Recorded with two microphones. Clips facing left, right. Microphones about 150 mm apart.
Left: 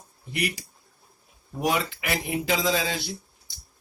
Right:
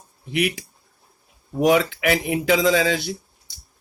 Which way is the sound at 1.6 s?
75° right (ahead or behind).